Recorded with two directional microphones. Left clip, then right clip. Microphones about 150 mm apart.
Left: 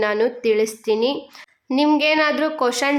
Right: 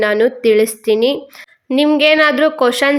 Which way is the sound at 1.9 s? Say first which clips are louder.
Right 7 dB; 25° right (ahead or behind).